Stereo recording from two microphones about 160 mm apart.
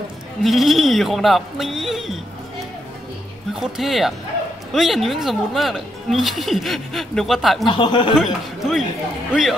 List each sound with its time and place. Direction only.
0.4 s speech: centre (ahead or behind)
3.5 s speech: centre (ahead or behind)
7.6 s speech: 30° left (ahead or behind)
8.2 s speech: centre (ahead or behind)